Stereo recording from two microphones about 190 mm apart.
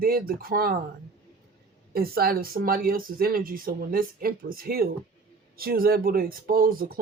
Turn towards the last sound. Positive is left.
turn(degrees=-50)  # may be behind; listen again after turning